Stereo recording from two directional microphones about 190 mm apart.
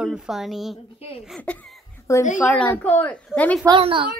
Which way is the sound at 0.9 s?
30° left (ahead or behind).